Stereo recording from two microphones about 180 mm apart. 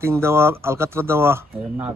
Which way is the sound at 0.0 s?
15° right (ahead or behind).